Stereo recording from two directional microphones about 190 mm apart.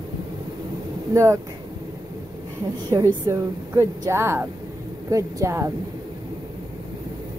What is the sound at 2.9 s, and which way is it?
A woman's voice, 20° right (ahead or behind).